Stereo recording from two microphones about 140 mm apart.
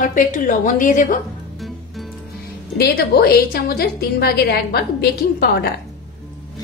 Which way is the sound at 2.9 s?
90° left.